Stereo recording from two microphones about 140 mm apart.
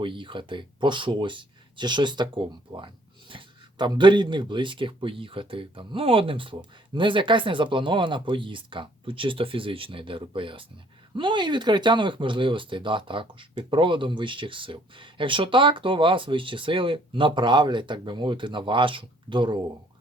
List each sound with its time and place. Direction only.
0.0 s speech: 35° right (ahead or behind)